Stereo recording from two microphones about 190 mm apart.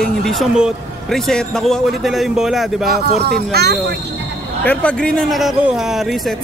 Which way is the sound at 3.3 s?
60° right (ahead or behind).